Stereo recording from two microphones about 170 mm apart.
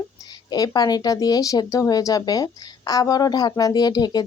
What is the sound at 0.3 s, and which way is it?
A woman's voice, 25° left (ahead or behind).